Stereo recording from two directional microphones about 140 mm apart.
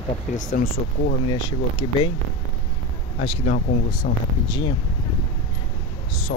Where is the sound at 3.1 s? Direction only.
45° left (ahead or behind).